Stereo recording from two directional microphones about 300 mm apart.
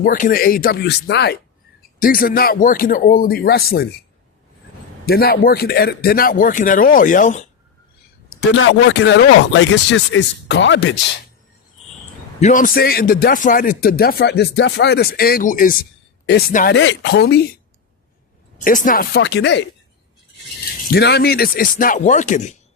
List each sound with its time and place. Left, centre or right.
0.0 s a man's voice: left
5.0 s a man's voice: left
8.4 s speech: left
12.4 s speech: left
18.6 s speech: left
20.9 s a man's voice: left